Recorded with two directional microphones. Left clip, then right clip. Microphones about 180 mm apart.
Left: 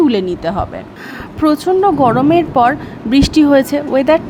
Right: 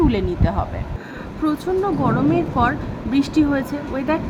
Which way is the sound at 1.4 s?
45° left (ahead or behind).